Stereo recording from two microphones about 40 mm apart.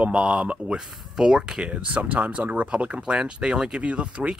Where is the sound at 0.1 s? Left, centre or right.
Right.